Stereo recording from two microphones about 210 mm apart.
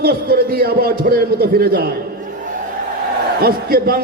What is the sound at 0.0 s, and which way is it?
A man's voice, 45° right (ahead or behind).